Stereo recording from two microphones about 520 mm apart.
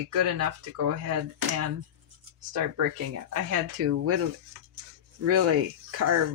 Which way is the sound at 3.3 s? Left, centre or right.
Right.